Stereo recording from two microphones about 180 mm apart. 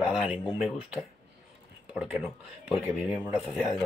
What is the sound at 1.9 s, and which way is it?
A man's voice, 5° right (ahead or behind).